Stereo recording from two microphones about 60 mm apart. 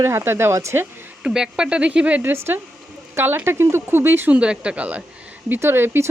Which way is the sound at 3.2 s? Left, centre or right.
Right.